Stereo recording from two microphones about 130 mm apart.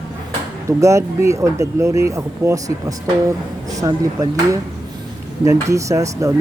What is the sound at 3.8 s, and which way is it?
Speech, 25° right (ahead or behind).